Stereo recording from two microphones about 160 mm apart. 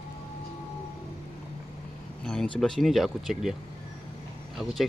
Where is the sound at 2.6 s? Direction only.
Centre (ahead or behind).